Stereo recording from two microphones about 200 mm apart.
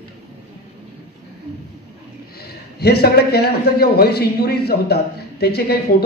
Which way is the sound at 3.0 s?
55° left (ahead or behind).